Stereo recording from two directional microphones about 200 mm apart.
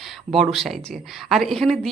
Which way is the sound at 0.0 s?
Centre (ahead or behind).